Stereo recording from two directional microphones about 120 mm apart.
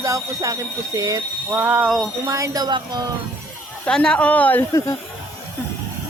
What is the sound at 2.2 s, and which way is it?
Speech, 30° right (ahead or behind).